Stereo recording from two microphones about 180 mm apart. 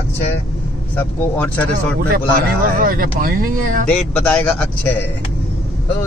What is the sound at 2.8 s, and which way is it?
Speech, 50° right (ahead or behind).